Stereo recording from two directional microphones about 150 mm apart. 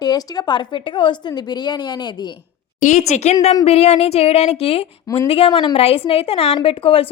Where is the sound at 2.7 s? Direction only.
55° left (ahead or behind); by 5.5 s 40° left (ahead or behind).